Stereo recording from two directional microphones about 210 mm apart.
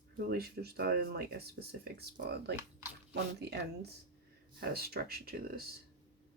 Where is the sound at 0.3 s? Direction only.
45° right (ahead or behind).